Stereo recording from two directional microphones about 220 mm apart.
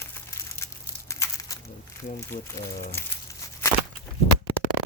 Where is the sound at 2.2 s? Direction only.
15° left (ahead or behind).